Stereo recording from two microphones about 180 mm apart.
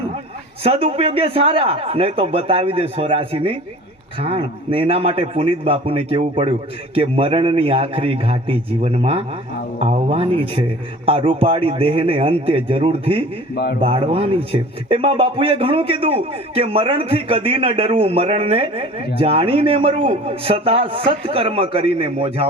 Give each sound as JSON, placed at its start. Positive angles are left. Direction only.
{"t": 0.6, "sound": "speech", "side_deg": -35}